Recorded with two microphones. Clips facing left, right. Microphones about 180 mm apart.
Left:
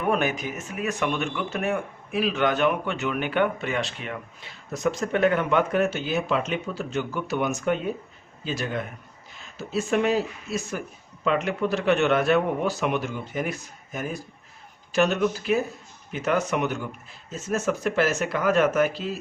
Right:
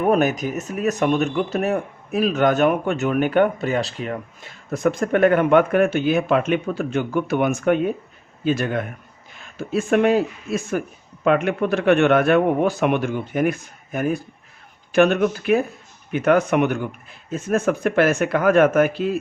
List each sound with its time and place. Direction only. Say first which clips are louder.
0.0 s speech: right 6 dB; 40° right (ahead or behind)